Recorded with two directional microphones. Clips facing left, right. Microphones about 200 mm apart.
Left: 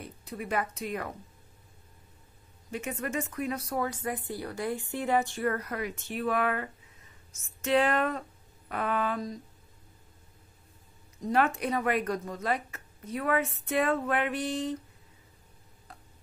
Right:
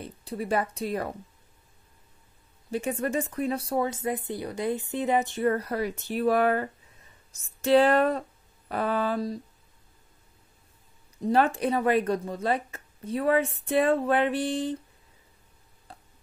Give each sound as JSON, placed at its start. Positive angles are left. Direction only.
{"t": 0.0, "sound": "a woman's voice", "side_deg": -30}
{"t": 2.7, "sound": "speech", "side_deg": -30}
{"t": 11.1, "sound": "speech", "side_deg": -30}
{"t": 15.9, "sound": "tick-tock", "side_deg": -30}